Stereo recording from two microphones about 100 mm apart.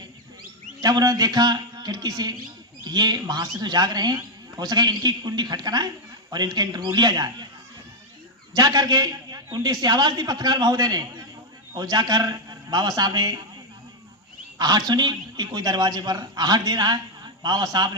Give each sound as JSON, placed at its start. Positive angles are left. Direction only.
{"t": 0.8, "sound": "a man's voice", "side_deg": -40}
{"t": 8.5, "sound": "a man's voice", "side_deg": -40}
{"t": 14.6, "sound": "a man's voice", "side_deg": -40}